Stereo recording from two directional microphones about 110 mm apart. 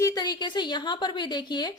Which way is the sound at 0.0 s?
35° left (ahead or behind).